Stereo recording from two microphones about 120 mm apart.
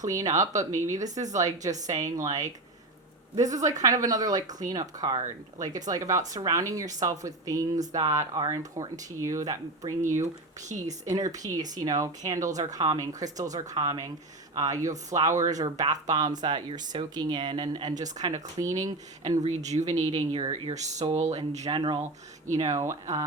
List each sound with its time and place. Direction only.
0.0 s speech: 30° right (ahead or behind)
10.7 s speech: 80° right
11.0 s speech: 30° right (ahead or behind)
19.5 s speech: 70° right (ahead or behind); by 20.5 s 50° right (ahead or behind)
20.5 s speech: 70° right (ahead or behind)
21.8 s speech: 40° right (ahead or behind)
22.5 s speech: 25° right (ahead or behind)